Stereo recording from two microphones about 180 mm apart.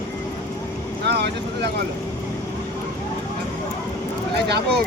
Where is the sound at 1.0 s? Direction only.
65° right (ahead or behind).